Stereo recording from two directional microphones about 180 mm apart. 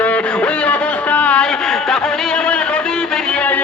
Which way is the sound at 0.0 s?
5° left (ahead or behind).